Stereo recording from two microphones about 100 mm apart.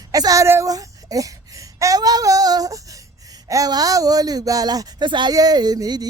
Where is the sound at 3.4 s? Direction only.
35° right (ahead or behind).